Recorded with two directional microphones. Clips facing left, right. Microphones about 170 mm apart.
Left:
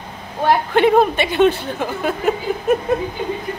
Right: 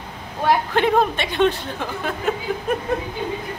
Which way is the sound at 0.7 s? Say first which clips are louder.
Left 5 dB; 5° left (ahead or behind).